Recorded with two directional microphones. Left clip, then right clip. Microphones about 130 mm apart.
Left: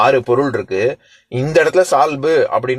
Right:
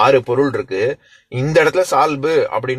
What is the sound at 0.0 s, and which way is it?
Speech, 50° left (ahead or behind).